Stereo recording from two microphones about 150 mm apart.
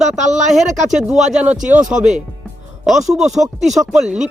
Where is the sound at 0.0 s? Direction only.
50° right (ahead or behind).